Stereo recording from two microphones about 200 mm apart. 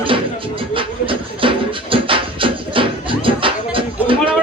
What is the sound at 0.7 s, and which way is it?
Music, 25° right (ahead or behind).